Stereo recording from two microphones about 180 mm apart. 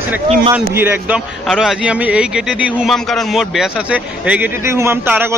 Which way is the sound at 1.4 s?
Centre (ahead or behind).